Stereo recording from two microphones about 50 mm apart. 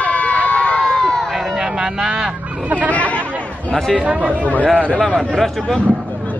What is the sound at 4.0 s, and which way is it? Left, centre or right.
Speech, right.